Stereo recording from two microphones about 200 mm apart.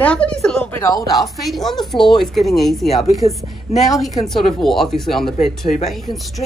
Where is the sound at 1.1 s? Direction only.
Centre (ahead or behind).